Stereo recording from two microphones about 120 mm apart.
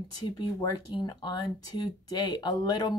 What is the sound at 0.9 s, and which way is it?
A woman's voice, 40° left (ahead or behind).